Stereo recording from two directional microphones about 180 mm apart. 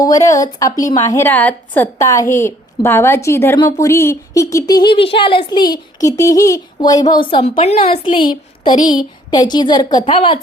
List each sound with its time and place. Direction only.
0.0 s a woman's voice: 20° left (ahead or behind)